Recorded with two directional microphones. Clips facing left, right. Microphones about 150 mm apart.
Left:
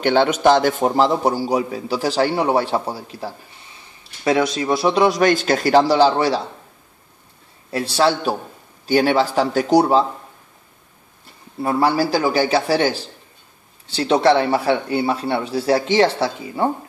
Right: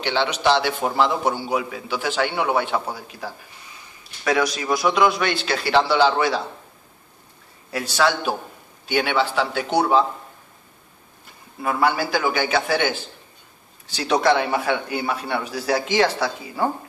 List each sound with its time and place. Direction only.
0.0 s a man's voice: 50° left (ahead or behind)
7.7 s a man's voice: 30° left (ahead or behind)
11.6 s a man's voice: 35° left (ahead or behind)